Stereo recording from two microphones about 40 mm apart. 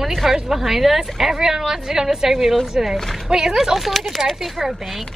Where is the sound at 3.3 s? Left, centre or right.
Centre.